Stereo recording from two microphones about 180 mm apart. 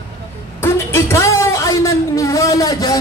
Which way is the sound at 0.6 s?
15° left (ahead or behind).